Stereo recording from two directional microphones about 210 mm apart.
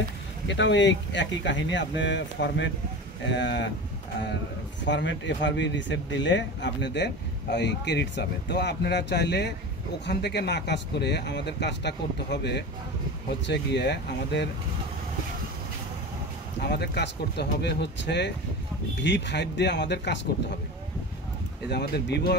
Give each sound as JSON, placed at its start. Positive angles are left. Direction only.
{"t": 0.5, "sound": "speech", "side_deg": 60}
{"t": 4.8, "sound": "speech", "side_deg": 60}
{"t": 16.6, "sound": "speech", "side_deg": 50}
{"t": 21.6, "sound": "speech", "side_deg": 50}